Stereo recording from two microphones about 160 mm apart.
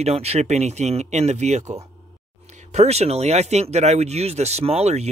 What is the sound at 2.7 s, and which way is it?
Speech, 40° right (ahead or behind).